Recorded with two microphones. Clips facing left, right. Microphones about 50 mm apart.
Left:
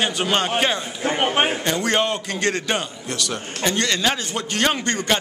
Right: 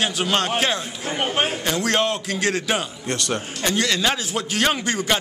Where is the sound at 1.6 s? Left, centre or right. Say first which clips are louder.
Even; centre.